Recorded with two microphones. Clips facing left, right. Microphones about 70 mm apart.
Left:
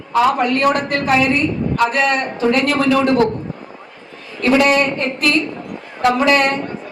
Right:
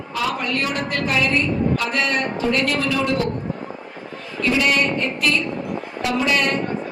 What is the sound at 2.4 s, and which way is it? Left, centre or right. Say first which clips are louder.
Speech: left 8 dB; left.